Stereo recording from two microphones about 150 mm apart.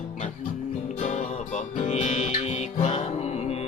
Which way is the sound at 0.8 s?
50° left (ahead or behind).